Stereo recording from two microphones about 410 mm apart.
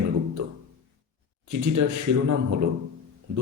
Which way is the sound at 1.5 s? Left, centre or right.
Right.